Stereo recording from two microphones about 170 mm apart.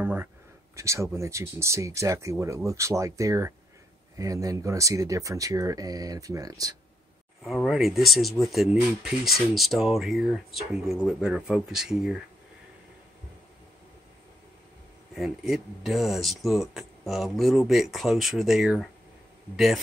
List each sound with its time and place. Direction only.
0.0 s speech: 10° right (ahead or behind)
7.4 s speech: centre (ahead or behind)
15.1 s speech: centre (ahead or behind)